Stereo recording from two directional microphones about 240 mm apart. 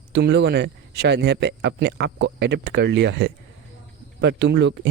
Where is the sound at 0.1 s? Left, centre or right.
Right.